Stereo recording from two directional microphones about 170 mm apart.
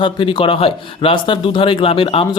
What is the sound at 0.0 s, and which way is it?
Speech, 30° left (ahead or behind).